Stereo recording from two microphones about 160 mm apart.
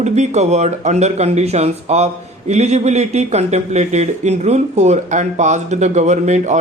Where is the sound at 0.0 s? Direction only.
45° right (ahead or behind).